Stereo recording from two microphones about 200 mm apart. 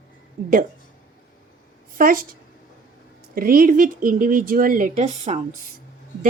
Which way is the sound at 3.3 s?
45° right (ahead or behind).